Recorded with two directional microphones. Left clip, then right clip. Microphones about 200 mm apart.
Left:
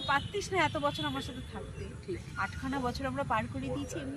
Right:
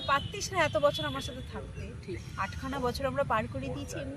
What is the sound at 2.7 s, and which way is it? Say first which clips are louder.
Speech: right 5 dB; 45° right (ahead or behind).